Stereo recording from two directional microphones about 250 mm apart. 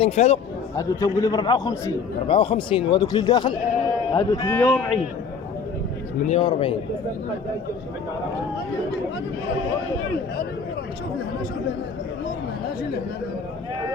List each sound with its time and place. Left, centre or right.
0.0 s a man's voice: left
0.8 s a man's voice: centre
6.2 s a man's voice: left